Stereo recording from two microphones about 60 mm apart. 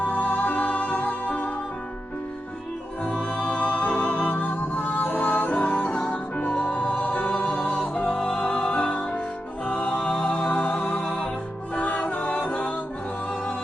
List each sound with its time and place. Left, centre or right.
0.0 s music: left
3.2 s music: centre
7.6 s music: centre
8.2 s music: centre